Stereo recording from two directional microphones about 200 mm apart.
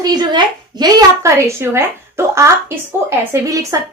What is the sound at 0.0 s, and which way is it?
A woman's voice, 20° right (ahead or behind).